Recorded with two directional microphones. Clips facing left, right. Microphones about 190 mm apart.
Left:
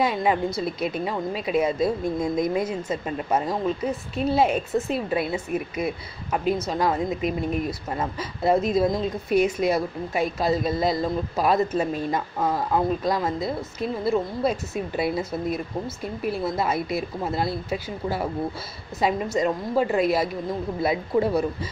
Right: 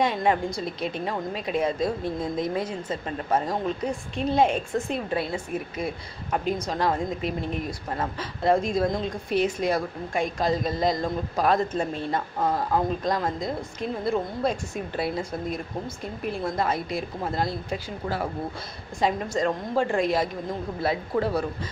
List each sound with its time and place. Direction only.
0.0 s a woman's voice: 5° left (ahead or behind)